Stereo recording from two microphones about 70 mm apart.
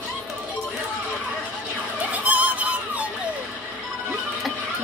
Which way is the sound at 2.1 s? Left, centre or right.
Right.